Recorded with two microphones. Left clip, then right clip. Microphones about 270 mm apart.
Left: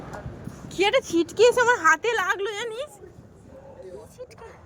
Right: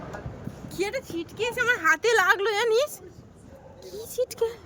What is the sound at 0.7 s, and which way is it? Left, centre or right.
Speech, centre.